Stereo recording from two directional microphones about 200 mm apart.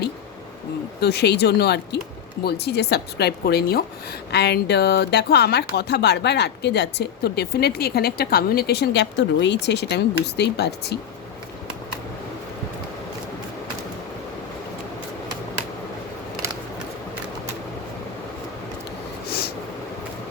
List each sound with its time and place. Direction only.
1.0 s a woman's voice: 55° left (ahead or behind)